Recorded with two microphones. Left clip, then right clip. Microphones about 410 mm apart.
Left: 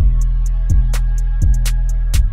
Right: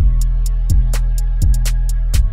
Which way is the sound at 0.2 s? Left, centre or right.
Centre.